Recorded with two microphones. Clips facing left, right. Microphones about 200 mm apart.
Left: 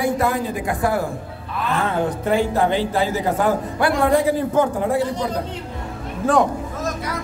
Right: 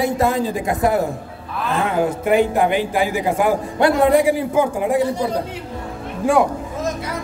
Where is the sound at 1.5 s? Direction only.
10° right (ahead or behind).